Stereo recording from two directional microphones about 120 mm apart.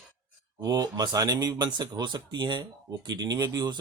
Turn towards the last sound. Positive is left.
turn(degrees=-30)  # may be behind; listen again after turning